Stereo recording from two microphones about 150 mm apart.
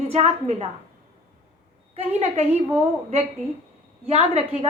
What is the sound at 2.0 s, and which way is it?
Speech, 45° right (ahead or behind).